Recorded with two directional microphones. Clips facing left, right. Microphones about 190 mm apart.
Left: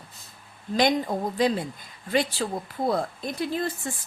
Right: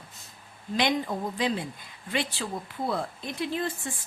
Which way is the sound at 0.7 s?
40° left (ahead or behind).